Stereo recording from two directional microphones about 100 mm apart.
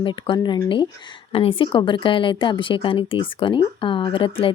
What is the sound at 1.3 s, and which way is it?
A woman's voice, 70° left (ahead or behind).